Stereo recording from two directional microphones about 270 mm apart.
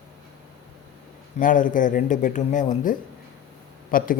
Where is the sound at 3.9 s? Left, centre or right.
Left.